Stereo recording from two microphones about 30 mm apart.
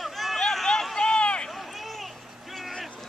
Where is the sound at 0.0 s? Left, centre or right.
Centre.